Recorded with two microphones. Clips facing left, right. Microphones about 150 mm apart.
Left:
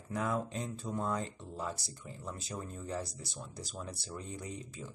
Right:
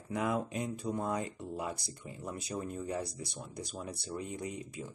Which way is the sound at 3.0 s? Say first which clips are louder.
Right 3 dB; 65° right (ahead or behind).